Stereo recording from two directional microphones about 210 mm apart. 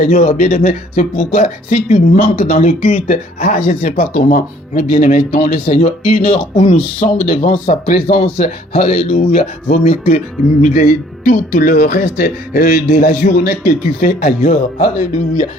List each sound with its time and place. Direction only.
0.0 s speech: 35° left (ahead or behind)